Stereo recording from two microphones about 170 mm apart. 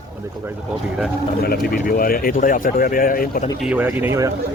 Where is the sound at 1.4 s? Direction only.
60° left (ahead or behind).